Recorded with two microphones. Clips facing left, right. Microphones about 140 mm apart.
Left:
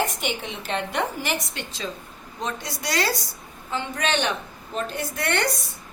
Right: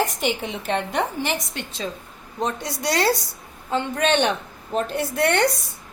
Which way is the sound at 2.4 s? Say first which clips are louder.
Right 5 dB; 65° right (ahead or behind).